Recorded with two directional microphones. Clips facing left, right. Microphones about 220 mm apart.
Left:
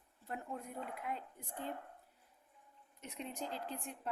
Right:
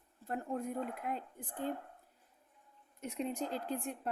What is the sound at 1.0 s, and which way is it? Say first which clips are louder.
Speech: right 4 dB; 50° right (ahead or behind).